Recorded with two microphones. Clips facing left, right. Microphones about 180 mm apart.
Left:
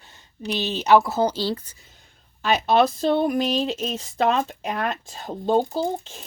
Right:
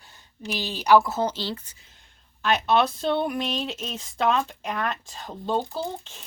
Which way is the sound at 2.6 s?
40° left (ahead or behind).